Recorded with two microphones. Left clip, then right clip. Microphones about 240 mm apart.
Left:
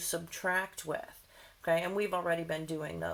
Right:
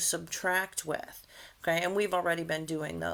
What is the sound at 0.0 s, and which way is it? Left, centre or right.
Speech, right.